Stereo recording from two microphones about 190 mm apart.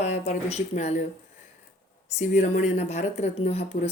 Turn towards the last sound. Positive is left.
turn(degrees=35)  # may be behind; listen again after turning